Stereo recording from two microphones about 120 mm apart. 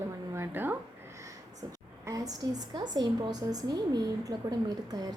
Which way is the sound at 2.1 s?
30° right (ahead or behind).